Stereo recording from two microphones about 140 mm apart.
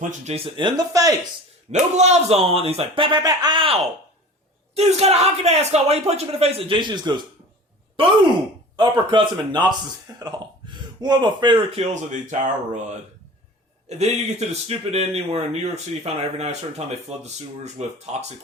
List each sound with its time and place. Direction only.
0.3 s speech: 40° right (ahead or behind)
2.0 s speech: 50° right (ahead or behind)
4.7 s speech: 50° right (ahead or behind); by 11.9 s 35° right (ahead or behind)
12.2 s speech: 60° right (ahead or behind)
13.8 s speech: 50° right (ahead or behind)